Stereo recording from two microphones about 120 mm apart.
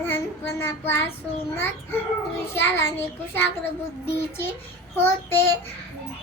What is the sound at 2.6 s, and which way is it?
Speech, 20° left (ahead or behind).